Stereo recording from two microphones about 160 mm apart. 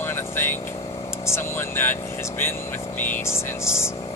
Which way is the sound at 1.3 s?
15° left (ahead or behind).